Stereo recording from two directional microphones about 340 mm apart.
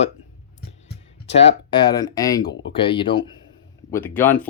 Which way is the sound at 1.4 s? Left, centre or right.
Centre.